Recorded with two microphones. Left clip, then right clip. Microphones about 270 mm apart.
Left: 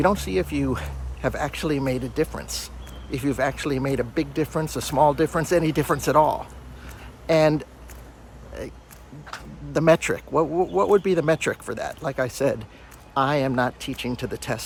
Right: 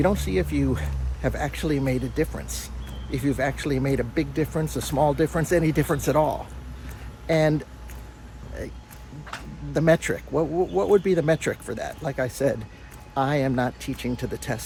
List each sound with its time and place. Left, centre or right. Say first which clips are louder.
0.0 s speech: left 2 dB; centre
9.7 s speech: left 2 dB; centre